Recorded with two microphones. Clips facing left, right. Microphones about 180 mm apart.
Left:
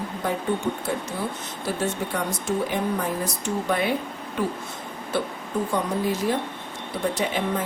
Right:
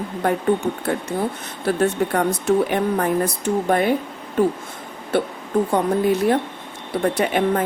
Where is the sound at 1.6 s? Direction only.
60° right (ahead or behind).